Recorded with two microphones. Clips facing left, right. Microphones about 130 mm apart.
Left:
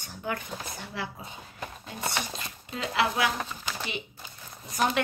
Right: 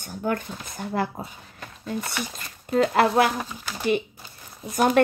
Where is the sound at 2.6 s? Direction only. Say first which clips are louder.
Right 9 dB; 50° right (ahead or behind).